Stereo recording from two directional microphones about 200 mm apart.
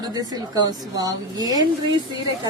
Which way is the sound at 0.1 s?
20° right (ahead or behind).